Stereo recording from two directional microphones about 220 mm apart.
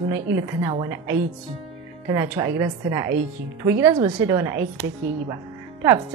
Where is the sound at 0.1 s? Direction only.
15° right (ahead or behind).